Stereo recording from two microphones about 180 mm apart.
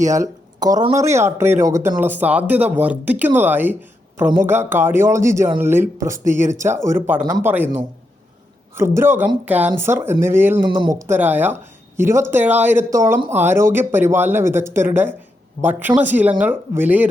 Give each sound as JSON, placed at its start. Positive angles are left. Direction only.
{"t": 0.2, "sound": "speech", "side_deg": -20}
{"t": 9.0, "sound": "speech", "side_deg": -10}